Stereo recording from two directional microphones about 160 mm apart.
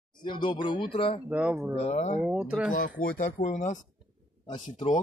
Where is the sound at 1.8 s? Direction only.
45° left (ahead or behind).